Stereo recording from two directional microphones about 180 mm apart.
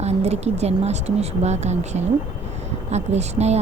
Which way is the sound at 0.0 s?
35° right (ahead or behind).